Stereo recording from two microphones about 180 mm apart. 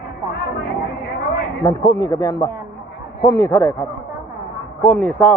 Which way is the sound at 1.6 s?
25° left (ahead or behind).